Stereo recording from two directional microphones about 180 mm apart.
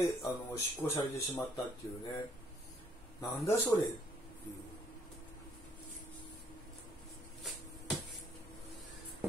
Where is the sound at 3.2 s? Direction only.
15° left (ahead or behind).